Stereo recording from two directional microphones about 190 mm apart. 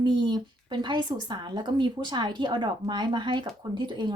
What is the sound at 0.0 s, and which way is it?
Speech, 25° right (ahead or behind).